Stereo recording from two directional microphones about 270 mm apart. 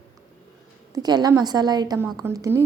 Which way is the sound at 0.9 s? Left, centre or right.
Centre.